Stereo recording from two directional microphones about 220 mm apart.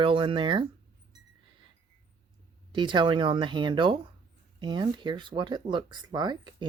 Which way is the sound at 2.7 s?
20° right (ahead or behind).